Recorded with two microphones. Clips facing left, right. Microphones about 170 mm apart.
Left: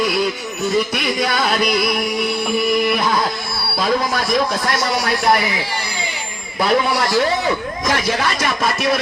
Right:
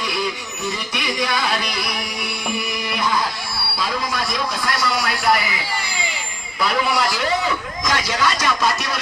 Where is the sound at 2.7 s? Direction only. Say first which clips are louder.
Left 10 dB; 50° left (ahead or behind).